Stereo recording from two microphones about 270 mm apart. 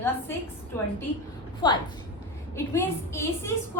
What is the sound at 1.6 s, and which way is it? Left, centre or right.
A woman's voice, centre.